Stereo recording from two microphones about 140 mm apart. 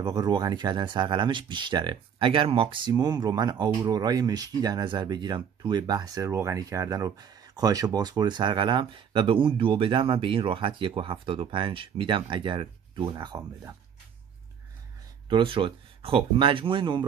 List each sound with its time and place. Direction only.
0.0 s speech: 30° right (ahead or behind)
15.2 s speech: 35° right (ahead or behind)